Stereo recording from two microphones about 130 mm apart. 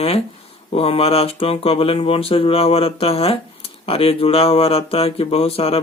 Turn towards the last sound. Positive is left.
turn(degrees=50)  # may be behind; listen again after turning